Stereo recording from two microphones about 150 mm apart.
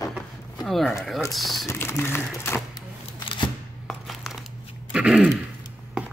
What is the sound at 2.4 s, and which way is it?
Music, 15° left (ahead or behind).